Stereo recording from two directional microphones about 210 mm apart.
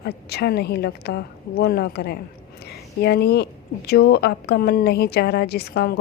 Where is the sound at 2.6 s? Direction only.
50° left (ahead or behind).